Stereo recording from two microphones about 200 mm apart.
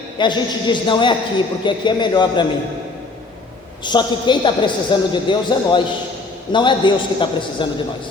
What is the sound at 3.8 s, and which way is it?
A man's voice, 25° left (ahead or behind).